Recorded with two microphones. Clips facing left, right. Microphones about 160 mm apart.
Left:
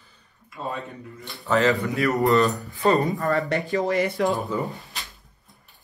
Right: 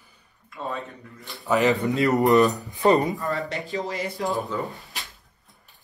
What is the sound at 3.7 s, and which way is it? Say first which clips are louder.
Speech: left 7 dB; 55° left (ahead or behind).